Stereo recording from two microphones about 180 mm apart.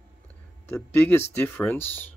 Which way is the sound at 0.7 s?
10° left (ahead or behind).